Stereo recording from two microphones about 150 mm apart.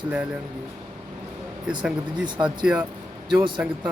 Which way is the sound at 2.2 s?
30° right (ahead or behind).